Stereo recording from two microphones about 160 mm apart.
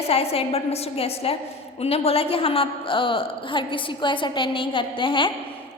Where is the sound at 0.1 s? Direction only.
40° left (ahead or behind).